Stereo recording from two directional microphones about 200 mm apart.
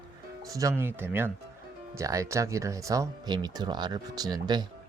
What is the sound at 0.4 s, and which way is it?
Speech, 15° right (ahead or behind).